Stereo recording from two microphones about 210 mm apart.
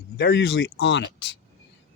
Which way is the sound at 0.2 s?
55° left (ahead or behind).